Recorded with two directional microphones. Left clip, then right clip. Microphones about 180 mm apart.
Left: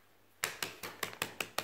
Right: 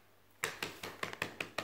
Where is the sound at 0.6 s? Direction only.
40° left (ahead or behind).